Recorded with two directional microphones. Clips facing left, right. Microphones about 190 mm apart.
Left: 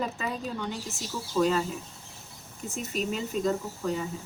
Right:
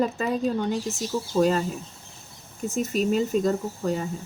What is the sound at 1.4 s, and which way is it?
Speech, 45° right (ahead or behind).